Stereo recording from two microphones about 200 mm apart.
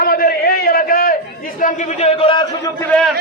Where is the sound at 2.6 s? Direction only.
10° left (ahead or behind).